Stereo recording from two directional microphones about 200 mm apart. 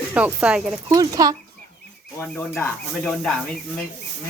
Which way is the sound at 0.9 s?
15° right (ahead or behind).